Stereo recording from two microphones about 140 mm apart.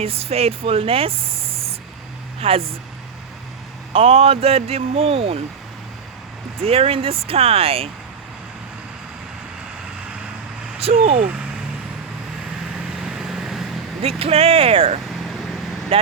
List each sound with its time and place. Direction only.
0.0 s speech: 45° right (ahead or behind)
3.9 s speech: 45° right (ahead or behind)
6.6 s speech: 45° right (ahead or behind)
10.8 s speech: 45° right (ahead or behind)
13.1 s vehicle: 5° right (ahead or behind)
14.0 s speech: 45° right (ahead or behind)